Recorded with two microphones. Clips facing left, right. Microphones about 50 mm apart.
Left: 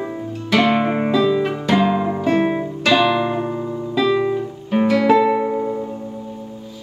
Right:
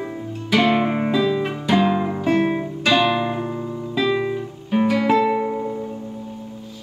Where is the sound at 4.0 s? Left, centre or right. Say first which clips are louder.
Left 3 dB; centre.